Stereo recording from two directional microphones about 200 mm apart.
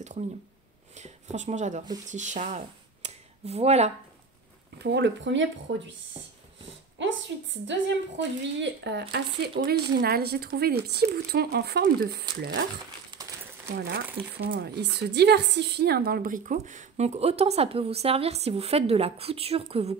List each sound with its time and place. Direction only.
0.9 s speech: 35° right (ahead or behind)
4.7 s speech: 60° right (ahead or behind)
7.0 s a woman's voice: 65° right (ahead or behind)
8.8 s speech: 55° right (ahead or behind)
13.7 s a woman's voice: 55° right (ahead or behind); by 20.0 s 30° right (ahead or behind)